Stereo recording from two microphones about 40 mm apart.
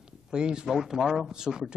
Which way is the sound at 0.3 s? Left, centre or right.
Right.